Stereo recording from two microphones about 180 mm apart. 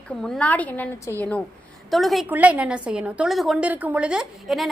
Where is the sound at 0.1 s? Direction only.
5° left (ahead or behind).